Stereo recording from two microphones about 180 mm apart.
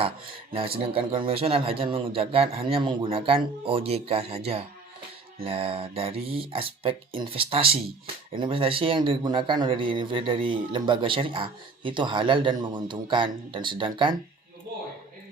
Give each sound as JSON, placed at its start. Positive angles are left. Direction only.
{"t": 0.5, "sound": "speech", "side_deg": -30}